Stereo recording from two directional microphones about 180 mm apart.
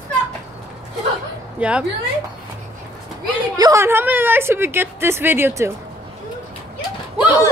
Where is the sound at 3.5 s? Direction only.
20° right (ahead or behind).